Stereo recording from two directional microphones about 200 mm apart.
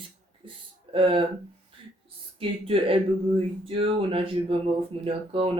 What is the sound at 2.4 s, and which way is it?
Speech, 30° right (ahead or behind).